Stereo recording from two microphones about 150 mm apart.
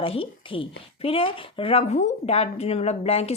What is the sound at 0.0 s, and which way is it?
A woman's voice, 40° left (ahead or behind).